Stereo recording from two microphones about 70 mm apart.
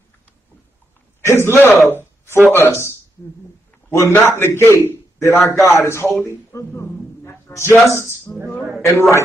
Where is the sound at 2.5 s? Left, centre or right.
Left.